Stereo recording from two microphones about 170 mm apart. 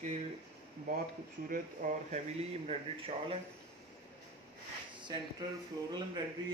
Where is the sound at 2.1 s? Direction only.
40° right (ahead or behind).